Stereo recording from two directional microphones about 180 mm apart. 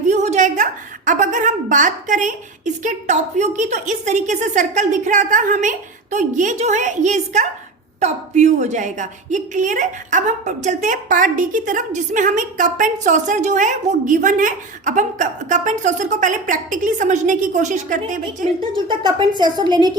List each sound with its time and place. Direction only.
0.1 s a woman's voice: 40° right (ahead or behind)
19.4 s a woman's voice: 25° right (ahead or behind)